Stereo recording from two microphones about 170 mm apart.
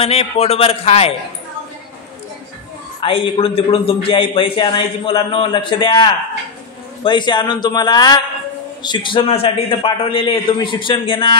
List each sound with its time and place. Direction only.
0.0 s a man's voice: 35° left (ahead or behind)
3.0 s a man's voice: 30° left (ahead or behind)